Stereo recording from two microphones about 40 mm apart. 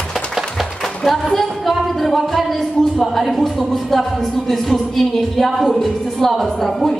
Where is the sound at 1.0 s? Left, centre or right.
Centre.